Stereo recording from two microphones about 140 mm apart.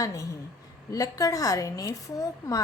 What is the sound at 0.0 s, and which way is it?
A woman's voice, 25° left (ahead or behind).